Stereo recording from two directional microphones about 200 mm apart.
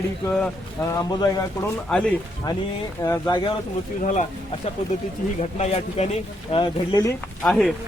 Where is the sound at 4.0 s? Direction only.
40° left (ahead or behind).